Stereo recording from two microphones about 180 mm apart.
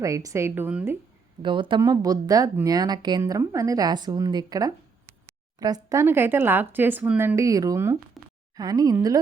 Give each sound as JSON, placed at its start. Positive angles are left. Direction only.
{"t": 0.0, "sound": "speech", "side_deg": -20}
{"t": 1.4, "sound": "speech", "side_deg": -25}
{"t": 8.2, "sound": "a sound", "side_deg": 0}
{"t": 8.5, "sound": "speech", "side_deg": -20}